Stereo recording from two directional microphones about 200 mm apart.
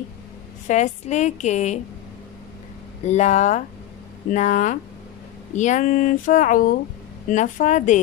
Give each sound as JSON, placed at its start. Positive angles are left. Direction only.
{"t": 0.7, "sound": "speech", "side_deg": 35}
{"t": 3.1, "sound": "speech", "side_deg": 35}